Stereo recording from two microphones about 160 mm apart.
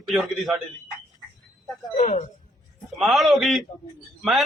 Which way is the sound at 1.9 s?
40° left (ahead or behind).